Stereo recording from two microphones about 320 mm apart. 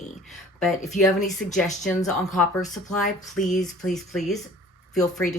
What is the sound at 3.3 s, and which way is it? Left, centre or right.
Speech, left.